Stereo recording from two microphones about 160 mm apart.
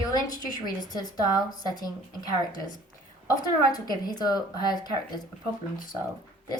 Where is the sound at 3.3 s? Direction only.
25° left (ahead or behind).